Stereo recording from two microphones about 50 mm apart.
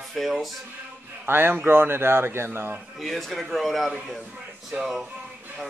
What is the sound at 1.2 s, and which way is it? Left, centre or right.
A man's voice, right.